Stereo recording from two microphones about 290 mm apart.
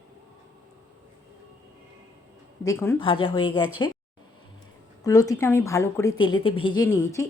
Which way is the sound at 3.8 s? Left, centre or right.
Centre.